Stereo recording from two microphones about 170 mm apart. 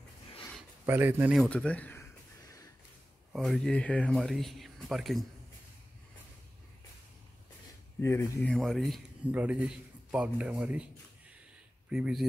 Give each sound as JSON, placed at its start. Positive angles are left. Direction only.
{"t": 0.8, "sound": "speech", "side_deg": -15}
{"t": 1.5, "sound": "speech", "side_deg": 5}
{"t": 2.4, "sound": "a sound", "side_deg": 20}
{"t": 3.3, "sound": "speech", "side_deg": 0}
{"t": 8.0, "sound": "speech", "side_deg": 15}
{"t": 11.9, "sound": "speech", "side_deg": -5}